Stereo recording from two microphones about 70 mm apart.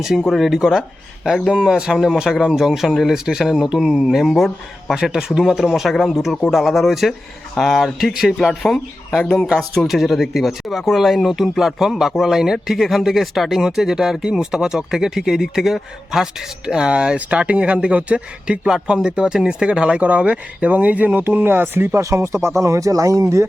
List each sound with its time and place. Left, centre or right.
0.0 s speech: centre; by 23.5 s right